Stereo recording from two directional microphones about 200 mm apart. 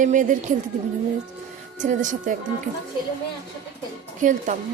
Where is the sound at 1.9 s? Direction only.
40° right (ahead or behind).